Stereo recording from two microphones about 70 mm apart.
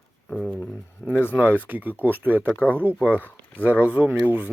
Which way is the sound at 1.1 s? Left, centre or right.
Left.